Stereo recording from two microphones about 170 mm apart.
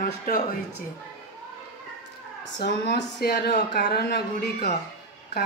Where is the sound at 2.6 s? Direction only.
75° left (ahead or behind).